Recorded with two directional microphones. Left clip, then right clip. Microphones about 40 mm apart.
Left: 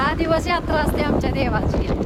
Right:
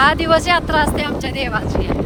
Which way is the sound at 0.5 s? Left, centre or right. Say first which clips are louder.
Right 5 dB; right.